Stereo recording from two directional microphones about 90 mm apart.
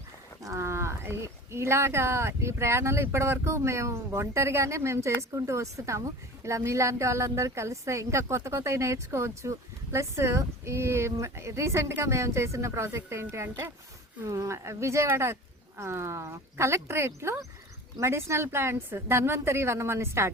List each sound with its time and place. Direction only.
0.4 s a woman's voice: 35° right (ahead or behind)